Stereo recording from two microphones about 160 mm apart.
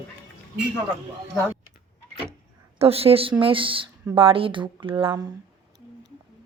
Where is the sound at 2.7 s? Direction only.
40° right (ahead or behind).